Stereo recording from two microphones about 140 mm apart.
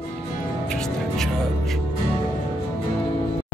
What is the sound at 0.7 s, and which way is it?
Music, 5° left (ahead or behind).